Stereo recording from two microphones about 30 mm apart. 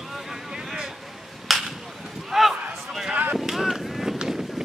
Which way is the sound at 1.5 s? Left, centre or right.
Centre.